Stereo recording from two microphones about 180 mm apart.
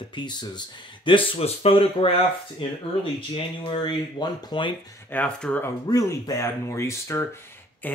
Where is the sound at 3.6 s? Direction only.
25° left (ahead or behind).